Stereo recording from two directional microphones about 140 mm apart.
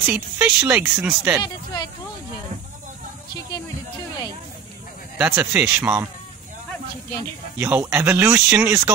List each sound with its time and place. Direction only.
0.0 s speech: 10° right (ahead or behind)
1.4 s speech: 30° left (ahead or behind)
5.1 s speech: 15° right (ahead or behind)
7.5 s speech: 15° right (ahead or behind)